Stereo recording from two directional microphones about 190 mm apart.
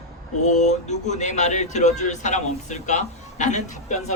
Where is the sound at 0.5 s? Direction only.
40° left (ahead or behind).